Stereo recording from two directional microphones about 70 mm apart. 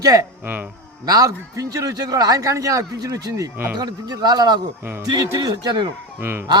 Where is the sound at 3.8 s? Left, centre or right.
Right.